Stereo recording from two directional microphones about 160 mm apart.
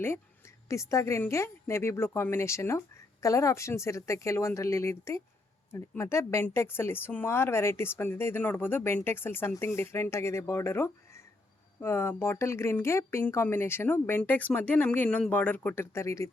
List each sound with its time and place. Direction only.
0.0 s a woman's voice: 15° left (ahead or behind)